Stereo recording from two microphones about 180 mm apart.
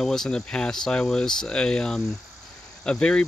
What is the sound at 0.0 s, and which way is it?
Speech, centre (ahead or behind).